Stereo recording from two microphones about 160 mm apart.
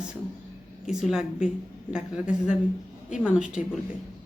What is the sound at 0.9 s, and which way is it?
Speech, 5° right (ahead or behind).